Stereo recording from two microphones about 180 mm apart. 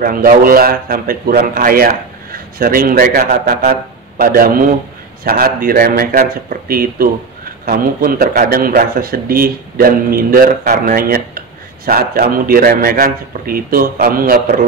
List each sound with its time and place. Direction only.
0.0 s a man's voice: 50° right (ahead or behind)